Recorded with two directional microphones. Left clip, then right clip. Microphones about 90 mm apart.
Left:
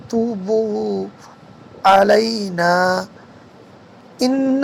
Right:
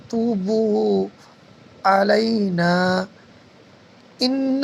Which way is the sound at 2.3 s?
35° right (ahead or behind).